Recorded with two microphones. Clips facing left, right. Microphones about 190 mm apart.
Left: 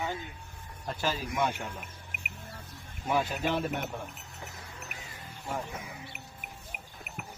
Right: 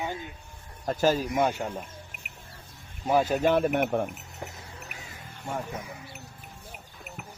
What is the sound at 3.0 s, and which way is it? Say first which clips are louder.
Speech: right 7 dB; 45° right (ahead or behind).